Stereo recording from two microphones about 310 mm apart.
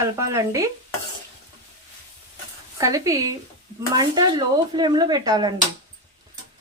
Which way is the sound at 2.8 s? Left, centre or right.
Centre.